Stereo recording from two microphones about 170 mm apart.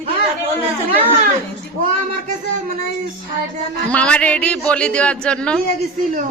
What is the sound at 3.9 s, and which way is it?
A man's voice, 5° left (ahead or behind).